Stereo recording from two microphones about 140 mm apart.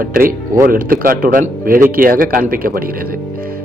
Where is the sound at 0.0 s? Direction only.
90° right.